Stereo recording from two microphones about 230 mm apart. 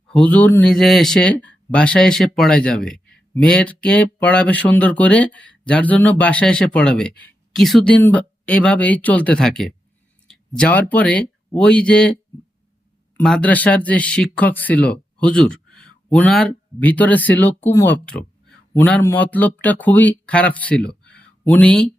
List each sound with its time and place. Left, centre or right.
0.1 s speech: centre
13.1 s speech: centre
20.8 s a sound: left
21.5 s speech: centre